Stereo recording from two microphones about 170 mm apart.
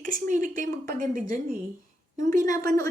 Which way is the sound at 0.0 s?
50° right (ahead or behind).